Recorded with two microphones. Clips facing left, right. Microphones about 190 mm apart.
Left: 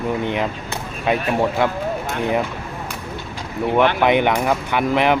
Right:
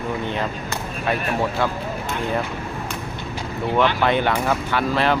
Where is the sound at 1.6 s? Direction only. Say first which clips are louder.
Left 2 dB; 20° left (ahead or behind).